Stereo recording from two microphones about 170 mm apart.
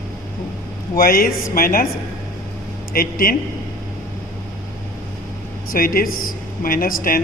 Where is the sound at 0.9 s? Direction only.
60° left (ahead or behind).